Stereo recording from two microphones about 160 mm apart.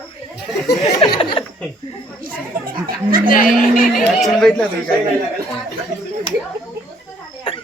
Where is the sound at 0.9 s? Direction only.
30° left (ahead or behind).